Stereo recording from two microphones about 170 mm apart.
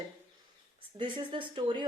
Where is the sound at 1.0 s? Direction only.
30° right (ahead or behind).